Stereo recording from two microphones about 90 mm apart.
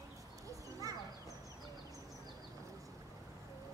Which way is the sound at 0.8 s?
40° right (ahead or behind).